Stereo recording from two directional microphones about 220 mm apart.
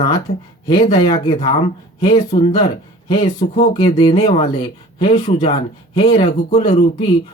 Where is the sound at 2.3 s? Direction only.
30° left (ahead or behind).